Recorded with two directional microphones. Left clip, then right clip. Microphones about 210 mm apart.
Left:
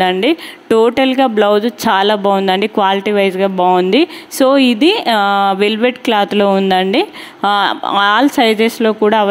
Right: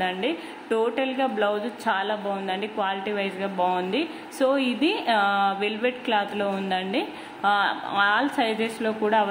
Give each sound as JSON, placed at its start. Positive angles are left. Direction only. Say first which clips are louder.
{"t": 0.0, "sound": "speech", "louder": "left 13 dB", "side_deg": 45}